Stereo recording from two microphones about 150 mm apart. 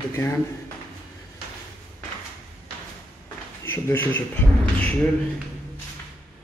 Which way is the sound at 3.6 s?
15° left (ahead or behind).